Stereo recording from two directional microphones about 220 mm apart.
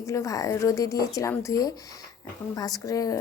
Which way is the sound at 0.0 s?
15° left (ahead or behind).